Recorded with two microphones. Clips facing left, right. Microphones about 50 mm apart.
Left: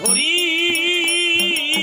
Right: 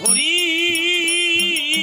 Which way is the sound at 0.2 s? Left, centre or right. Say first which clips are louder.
Even; centre.